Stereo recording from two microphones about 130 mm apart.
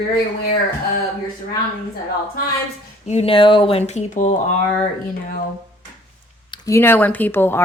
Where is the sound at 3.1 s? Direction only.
50° left (ahead or behind).